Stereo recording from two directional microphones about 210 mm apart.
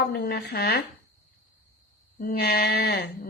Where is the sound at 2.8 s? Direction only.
50° left (ahead or behind).